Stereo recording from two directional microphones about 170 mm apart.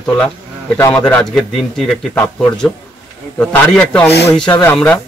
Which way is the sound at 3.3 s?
5° left (ahead or behind).